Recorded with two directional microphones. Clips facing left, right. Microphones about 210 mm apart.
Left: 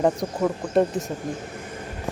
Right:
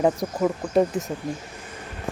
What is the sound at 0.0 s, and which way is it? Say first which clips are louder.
Speech: even; centre (ahead or behind).